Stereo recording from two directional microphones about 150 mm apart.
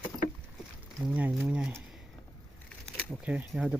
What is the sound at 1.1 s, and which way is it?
Speech, 10° right (ahead or behind).